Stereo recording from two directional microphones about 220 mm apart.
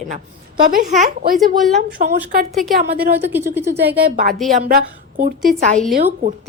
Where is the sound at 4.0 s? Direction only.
45° right (ahead or behind).